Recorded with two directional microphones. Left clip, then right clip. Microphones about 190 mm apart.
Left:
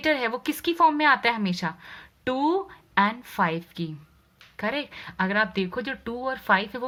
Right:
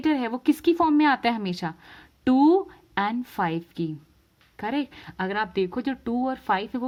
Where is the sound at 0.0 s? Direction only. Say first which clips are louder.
Even; 35° right (ahead or behind).